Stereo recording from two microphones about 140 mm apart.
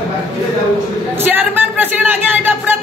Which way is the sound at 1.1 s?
15° right (ahead or behind).